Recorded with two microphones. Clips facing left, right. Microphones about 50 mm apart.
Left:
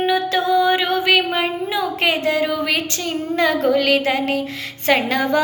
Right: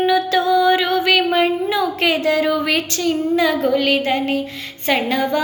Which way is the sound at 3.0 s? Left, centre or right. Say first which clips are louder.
Right 5 dB; left.